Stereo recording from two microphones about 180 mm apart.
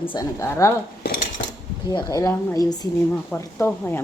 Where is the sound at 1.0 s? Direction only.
55° left (ahead or behind).